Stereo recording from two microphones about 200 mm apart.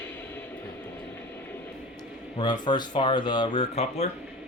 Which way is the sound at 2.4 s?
20° left (ahead or behind).